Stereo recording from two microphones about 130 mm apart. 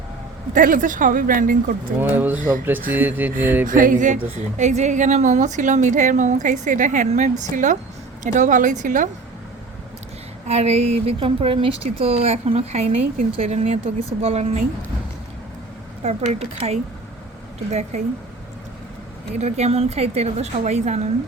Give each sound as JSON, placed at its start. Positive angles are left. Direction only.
{"t": 0.5, "sound": "a woman's voice", "side_deg": -90}
{"t": 2.0, "sound": "speech", "side_deg": -15}
{"t": 3.7, "sound": "a woman's voice", "side_deg": -90}
{"t": 10.5, "sound": "speech", "side_deg": -55}
{"t": 16.0, "sound": "a woman's voice", "side_deg": -55}
{"t": 19.4, "sound": "a woman's voice", "side_deg": -55}